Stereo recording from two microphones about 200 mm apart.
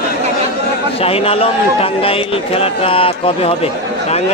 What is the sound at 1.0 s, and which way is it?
A man's voice, 30° left (ahead or behind).